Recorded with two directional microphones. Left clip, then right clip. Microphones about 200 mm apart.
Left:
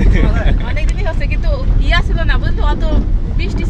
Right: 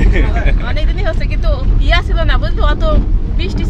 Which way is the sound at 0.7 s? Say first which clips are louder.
Right 2 dB; 55° right (ahead or behind).